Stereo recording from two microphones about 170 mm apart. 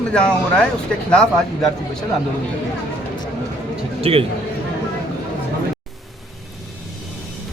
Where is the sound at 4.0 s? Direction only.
35° right (ahead or behind).